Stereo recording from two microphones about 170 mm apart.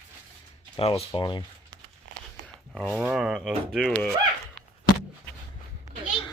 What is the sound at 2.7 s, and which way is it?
Speech, 5° right (ahead or behind).